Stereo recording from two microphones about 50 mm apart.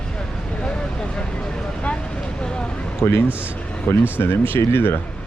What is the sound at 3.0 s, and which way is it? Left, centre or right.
Speech, left.